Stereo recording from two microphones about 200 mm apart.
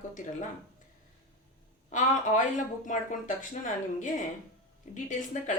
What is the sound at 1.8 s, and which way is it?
Speech, 40° left (ahead or behind).